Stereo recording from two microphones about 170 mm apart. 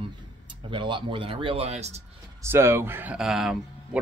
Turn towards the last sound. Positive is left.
turn(degrees=-5)  # may be behind; listen again after turning